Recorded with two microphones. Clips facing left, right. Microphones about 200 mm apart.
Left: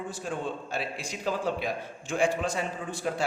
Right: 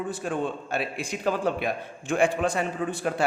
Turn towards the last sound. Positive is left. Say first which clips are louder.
# right 4 dB
turn(degrees=-60)  # may be behind; listen again after turning